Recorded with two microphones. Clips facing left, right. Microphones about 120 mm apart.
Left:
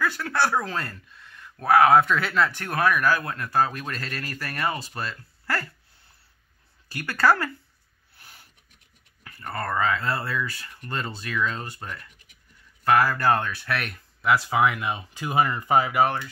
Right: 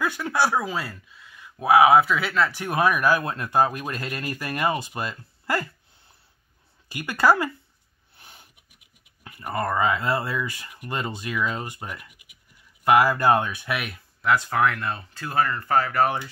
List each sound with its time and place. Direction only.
0.0 s speech: 15° right (ahead or behind)
2.6 s speech: 15° right (ahead or behind)
6.9 s speech: 15° right (ahead or behind)
14.2 s speech: 5° left (ahead or behind)